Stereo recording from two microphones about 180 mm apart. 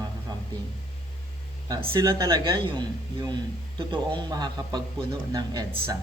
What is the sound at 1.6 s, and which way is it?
Speech, 20° right (ahead or behind).